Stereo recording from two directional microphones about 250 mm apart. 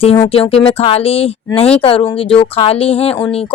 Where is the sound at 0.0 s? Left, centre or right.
Left.